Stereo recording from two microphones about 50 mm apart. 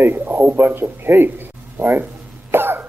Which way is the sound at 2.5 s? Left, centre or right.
Right.